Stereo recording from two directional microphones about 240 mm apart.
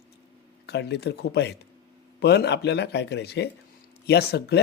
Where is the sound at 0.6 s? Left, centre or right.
Left.